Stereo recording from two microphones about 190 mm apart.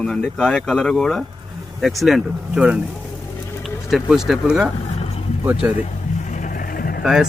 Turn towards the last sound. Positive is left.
turn(degrees=50)  # may be behind; listen again after turning